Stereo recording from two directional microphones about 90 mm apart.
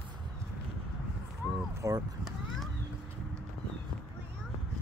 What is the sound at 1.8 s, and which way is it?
Speech, 35° right (ahead or behind).